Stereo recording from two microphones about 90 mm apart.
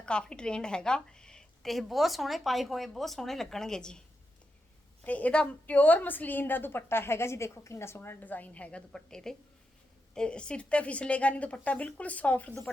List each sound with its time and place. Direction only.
0.0 s a woman's voice: 10° left (ahead or behind)
5.0 s a woman's voice: 15° left (ahead or behind)